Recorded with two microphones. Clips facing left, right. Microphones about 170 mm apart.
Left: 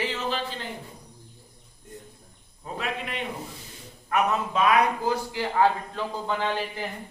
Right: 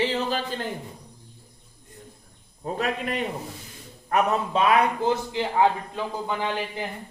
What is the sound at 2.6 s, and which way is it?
Speech, 40° right (ahead or behind).